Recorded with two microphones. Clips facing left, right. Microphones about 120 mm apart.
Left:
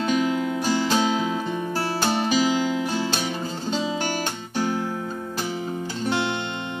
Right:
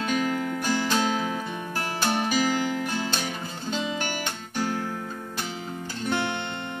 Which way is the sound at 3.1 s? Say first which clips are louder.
Left 4 dB; 30° left (ahead or behind).